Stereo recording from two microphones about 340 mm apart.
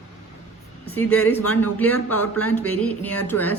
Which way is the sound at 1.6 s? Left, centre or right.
Centre.